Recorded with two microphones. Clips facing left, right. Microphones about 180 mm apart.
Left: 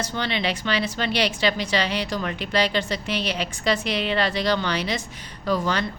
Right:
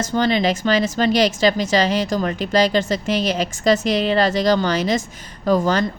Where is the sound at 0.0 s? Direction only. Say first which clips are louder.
Right 8 dB; 45° right (ahead or behind).